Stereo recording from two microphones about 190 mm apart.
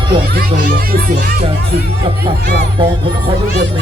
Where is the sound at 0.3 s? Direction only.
50° right (ahead or behind).